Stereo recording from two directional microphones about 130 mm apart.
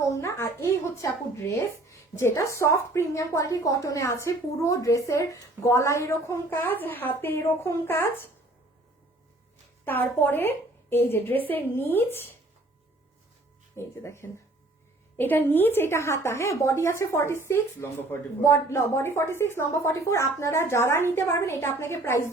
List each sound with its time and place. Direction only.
0.0 s a woman's voice: 25° left (ahead or behind)
9.8 s a woman's voice: 15° left (ahead or behind)
13.7 s a woman's voice: 20° left (ahead or behind)